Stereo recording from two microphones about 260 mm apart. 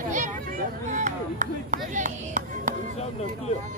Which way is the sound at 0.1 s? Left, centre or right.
Right.